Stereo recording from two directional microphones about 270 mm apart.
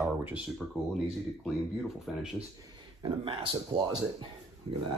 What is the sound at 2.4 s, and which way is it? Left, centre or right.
Speech, centre.